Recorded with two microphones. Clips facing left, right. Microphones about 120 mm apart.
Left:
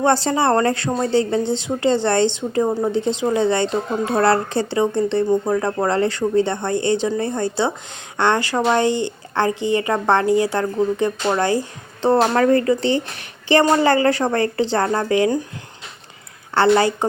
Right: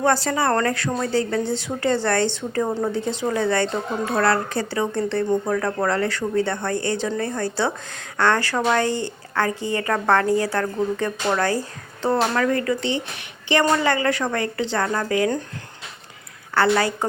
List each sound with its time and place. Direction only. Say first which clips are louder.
0.0 s speech: left 3 dB; 25° left (ahead or behind)
12.0 s a woman's voice: left 5 dB; 30° left (ahead or behind)
16.6 s speech: left 4 dB; 25° left (ahead or behind)